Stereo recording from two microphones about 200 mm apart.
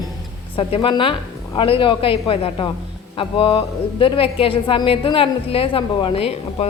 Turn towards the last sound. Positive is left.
turn(degrees=30)  # may be behind; listen again after turning